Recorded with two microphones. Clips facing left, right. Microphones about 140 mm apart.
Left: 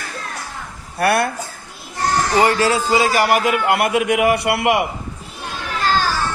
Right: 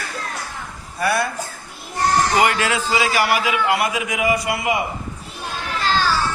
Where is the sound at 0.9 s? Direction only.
60° left (ahead or behind).